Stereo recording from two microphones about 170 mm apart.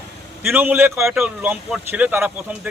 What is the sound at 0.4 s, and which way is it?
A man's voice, 10° right (ahead or behind).